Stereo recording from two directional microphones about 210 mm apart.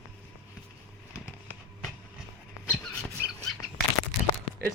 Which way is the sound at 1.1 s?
10° left (ahead or behind).